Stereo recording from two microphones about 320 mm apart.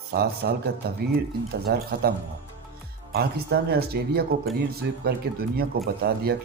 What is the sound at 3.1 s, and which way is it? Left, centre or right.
Speech, right.